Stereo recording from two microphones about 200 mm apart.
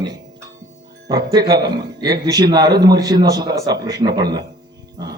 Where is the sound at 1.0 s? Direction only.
20° right (ahead or behind).